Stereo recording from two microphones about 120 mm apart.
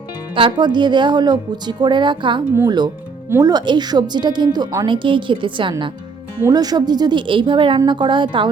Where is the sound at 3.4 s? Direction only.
35° right (ahead or behind).